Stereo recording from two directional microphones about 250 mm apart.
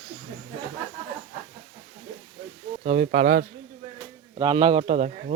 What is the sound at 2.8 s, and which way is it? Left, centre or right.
Speech, right.